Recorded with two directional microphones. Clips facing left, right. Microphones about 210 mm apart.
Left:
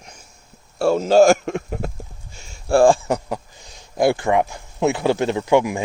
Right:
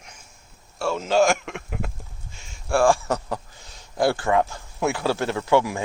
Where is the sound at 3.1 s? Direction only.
15° left (ahead or behind).